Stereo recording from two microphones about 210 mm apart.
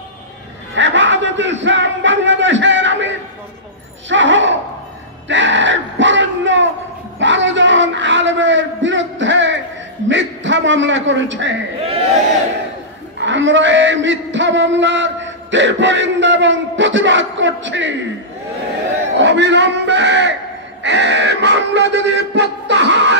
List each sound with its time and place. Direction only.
0.7 s music: 60° right (ahead or behind)
4.1 s speech: 60° right (ahead or behind)
5.3 s crowd: 60° right (ahead or behind)
7.2 s a sound: 60° right (ahead or behind)
10.0 s a man's voice: 60° right (ahead or behind)
13.2 s speech: 60° right (ahead or behind)
19.1 s a man's voice: 55° right (ahead or behind)
20.8 s a sound: 55° right (ahead or behind)